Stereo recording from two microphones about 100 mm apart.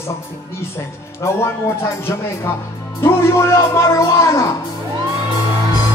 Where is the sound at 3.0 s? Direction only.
25° left (ahead or behind).